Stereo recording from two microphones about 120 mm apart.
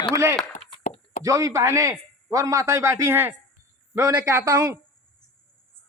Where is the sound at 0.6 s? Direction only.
55° left (ahead or behind).